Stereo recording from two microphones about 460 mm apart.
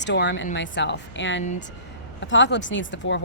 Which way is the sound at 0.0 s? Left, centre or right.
Left.